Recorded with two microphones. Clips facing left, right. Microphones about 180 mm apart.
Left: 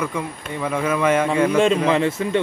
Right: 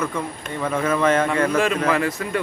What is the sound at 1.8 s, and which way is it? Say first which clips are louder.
Speech: left 3 dB; 25° left (ahead or behind).